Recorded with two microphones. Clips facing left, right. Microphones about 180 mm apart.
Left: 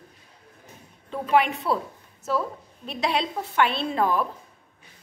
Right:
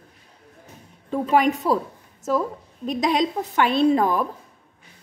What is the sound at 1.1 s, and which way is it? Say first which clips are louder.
A woman's voice: right 3 dB; 40° right (ahead or behind).